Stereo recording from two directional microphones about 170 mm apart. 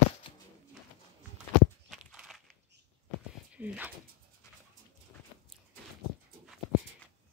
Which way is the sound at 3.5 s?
10° right (ahead or behind).